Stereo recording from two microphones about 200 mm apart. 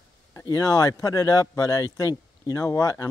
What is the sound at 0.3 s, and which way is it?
Speech, 15° left (ahead or behind).